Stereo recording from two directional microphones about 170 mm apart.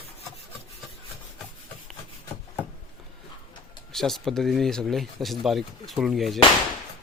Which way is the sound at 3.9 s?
Centre (ahead or behind).